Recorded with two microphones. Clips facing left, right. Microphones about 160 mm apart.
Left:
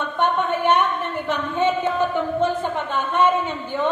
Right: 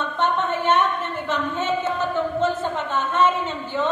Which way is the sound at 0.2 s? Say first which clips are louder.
Left 2 dB; 15° left (ahead or behind).